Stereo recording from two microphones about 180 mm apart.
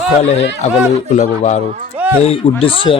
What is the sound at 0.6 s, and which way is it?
Speech, 40° left (ahead or behind).